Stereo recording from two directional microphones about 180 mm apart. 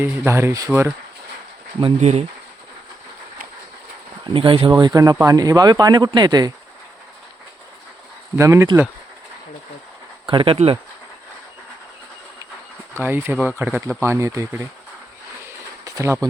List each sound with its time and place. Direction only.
0.0 s speech: 15° right (ahead or behind)
1.8 s speech: 35° right (ahead or behind)
4.4 s speech: 30° right (ahead or behind)
8.4 s speech: 15° right (ahead or behind)
10.2 s speech: 30° right (ahead or behind)
13.0 s speech: 10° right (ahead or behind)
15.8 s speech: 15° right (ahead or behind)